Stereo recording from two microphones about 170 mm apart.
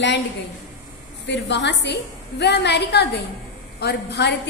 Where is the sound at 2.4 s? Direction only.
75° left (ahead or behind).